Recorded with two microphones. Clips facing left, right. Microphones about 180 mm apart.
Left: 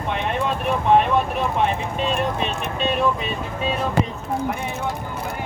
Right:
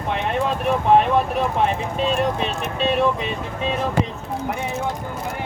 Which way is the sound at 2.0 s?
35° right (ahead or behind).